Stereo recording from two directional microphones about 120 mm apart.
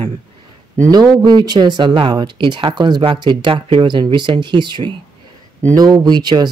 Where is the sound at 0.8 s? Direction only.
35° right (ahead or behind).